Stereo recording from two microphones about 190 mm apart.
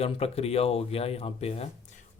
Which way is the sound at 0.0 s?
30° left (ahead or behind).